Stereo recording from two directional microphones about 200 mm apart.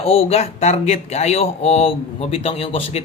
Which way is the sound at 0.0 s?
30° left (ahead or behind).